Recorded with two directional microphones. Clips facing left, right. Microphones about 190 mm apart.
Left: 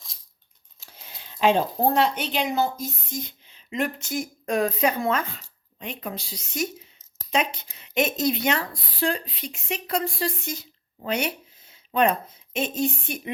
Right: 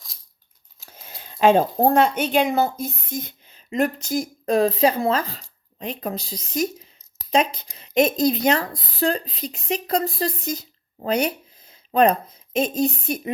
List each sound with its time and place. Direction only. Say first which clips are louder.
0.8 s a woman's voice: right 4 dB; 45° right (ahead or behind)